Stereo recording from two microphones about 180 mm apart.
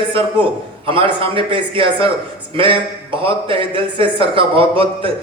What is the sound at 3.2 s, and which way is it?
Speech, 30° right (ahead or behind).